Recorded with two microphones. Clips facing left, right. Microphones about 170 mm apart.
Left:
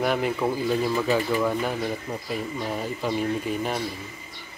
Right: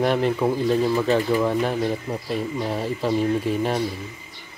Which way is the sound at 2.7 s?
30° right (ahead or behind).